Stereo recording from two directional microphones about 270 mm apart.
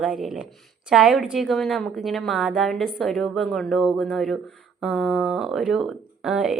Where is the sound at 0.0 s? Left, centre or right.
Centre.